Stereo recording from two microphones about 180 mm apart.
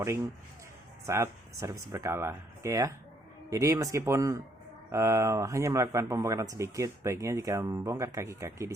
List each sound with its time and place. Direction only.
1.0 s speech: 15° right (ahead or behind)